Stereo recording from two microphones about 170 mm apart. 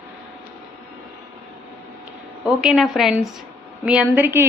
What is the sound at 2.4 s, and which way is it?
A woman's voice, 5° right (ahead or behind).